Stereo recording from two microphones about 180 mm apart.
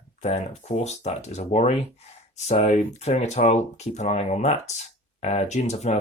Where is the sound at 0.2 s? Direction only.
40° left (ahead or behind).